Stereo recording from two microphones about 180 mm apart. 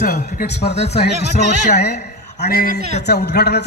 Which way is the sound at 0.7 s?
65° left (ahead or behind).